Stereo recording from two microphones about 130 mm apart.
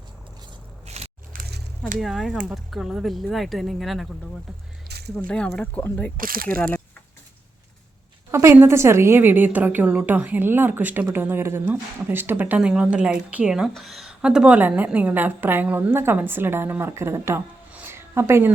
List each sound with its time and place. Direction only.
0.9 s biting: 55° right (ahead or behind)
2.0 s speech: centre (ahead or behind)
5.1 s speech: 5° left (ahead or behind)
6.1 s speech: 90° right
8.3 s speech: 20° right (ahead or behind)